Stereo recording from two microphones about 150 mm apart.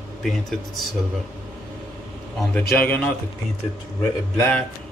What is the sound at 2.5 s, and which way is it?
Speech, 10° left (ahead or behind).